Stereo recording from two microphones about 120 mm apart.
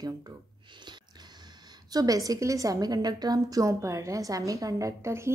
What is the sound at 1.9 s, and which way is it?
A woman's voice, 30° right (ahead or behind).